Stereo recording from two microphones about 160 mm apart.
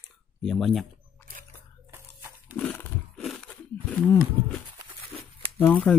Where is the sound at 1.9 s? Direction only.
15° right (ahead or behind).